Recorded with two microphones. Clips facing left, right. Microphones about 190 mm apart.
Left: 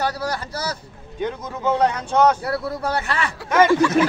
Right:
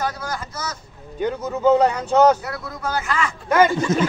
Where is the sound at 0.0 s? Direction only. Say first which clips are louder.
Left 2 dB; 35° left (ahead or behind).